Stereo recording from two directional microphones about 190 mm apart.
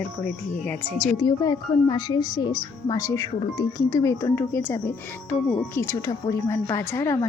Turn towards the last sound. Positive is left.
turn(degrees=15)  # may be behind; listen again after turning